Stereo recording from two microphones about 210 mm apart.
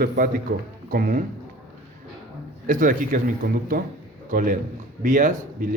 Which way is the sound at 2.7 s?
40° right (ahead or behind).